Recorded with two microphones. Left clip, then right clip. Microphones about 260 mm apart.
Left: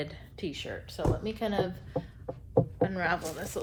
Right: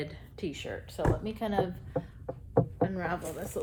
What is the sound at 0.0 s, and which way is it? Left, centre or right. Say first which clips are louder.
Speech: left 1 dB; centre.